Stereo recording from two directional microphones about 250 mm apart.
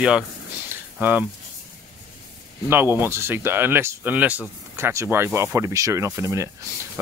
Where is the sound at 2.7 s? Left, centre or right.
Centre.